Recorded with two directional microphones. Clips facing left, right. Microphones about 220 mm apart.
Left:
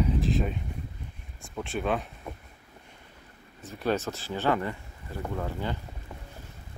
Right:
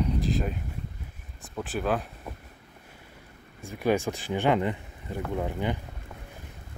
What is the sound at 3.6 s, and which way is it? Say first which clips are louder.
Speech: right 3 dB; 10° right (ahead or behind).